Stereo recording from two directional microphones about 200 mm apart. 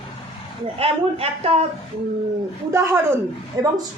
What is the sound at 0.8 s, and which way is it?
Speech, 30° right (ahead or behind).